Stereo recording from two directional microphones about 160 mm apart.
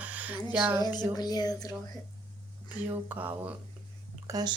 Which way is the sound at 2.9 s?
10° right (ahead or behind).